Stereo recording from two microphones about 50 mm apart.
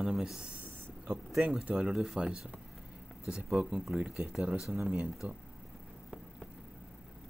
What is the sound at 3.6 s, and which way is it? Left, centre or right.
Speech, centre.